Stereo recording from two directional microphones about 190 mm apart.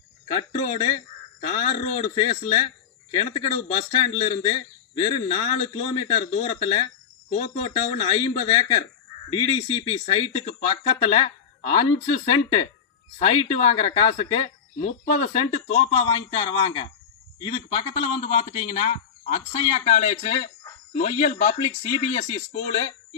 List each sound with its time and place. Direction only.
0.3 s a man's voice: 30° left (ahead or behind)
2.1 s a man's voice: 30° left (ahead or behind)
12.3 s a man's voice: 30° left (ahead or behind)